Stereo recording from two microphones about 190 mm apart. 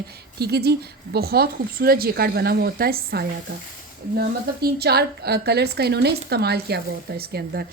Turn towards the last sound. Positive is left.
turn(degrees=-55)  # may be behind; listen again after turning